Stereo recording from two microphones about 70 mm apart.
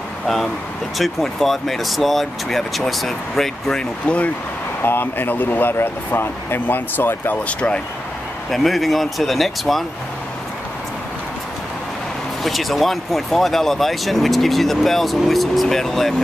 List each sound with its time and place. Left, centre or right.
0.9 s speech: centre
4.8 s speech: left
7.4 s speech: centre
8.5 s speech: centre
12.4 s speech: centre